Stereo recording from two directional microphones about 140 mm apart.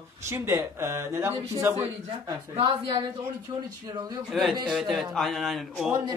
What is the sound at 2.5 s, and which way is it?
Speech, 35° right (ahead or behind).